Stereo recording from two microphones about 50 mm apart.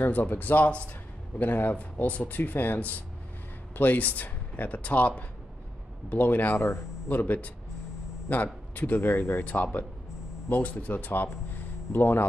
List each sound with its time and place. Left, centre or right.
0.0 s speech: left
9.0 s speech: left
9.4 s speech: left